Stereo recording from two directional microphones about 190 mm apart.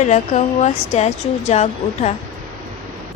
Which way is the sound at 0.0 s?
40° left (ahead or behind).